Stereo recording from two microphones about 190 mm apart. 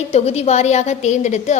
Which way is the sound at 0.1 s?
35° left (ahead or behind).